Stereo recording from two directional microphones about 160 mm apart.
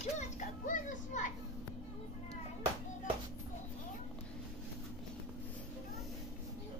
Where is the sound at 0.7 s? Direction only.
50° left (ahead or behind).